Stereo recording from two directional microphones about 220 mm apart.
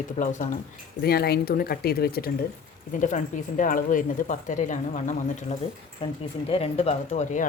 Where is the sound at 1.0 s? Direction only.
45° left (ahead or behind).